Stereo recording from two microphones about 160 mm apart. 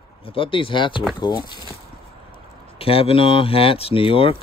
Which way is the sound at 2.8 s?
35° left (ahead or behind).